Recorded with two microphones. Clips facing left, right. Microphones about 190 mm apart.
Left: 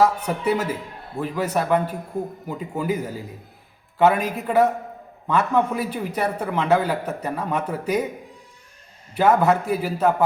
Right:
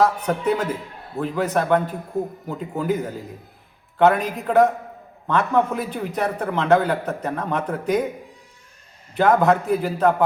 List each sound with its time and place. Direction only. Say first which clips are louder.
0.0 s a man's voice: even; 10° left (ahead or behind)
9.1 s a man's voice: right 1 dB; 10° left (ahead or behind)